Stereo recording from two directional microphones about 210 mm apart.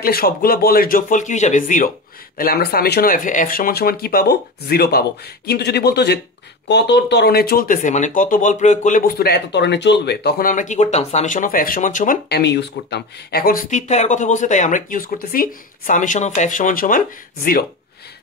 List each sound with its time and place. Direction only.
0.0 s speech: 45° left (ahead or behind)